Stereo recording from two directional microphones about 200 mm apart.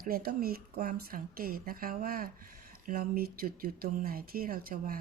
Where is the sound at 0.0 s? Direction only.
45° right (ahead or behind).